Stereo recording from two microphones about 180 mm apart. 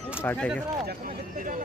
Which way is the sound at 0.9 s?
50° right (ahead or behind).